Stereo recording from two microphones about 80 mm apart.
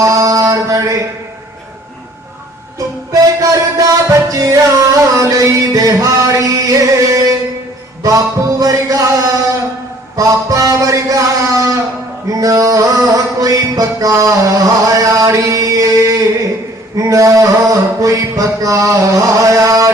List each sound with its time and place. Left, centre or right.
0.0 s mantra: right
2.7 s music: right
10.2 s a sound: right
12.3 s music: right
17.0 s mantra: right